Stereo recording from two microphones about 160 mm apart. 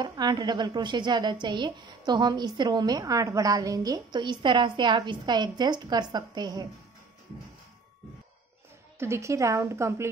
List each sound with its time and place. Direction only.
0.0 s a woman's voice: 25° right (ahead or behind)
9.0 s a woman's voice: 20° right (ahead or behind)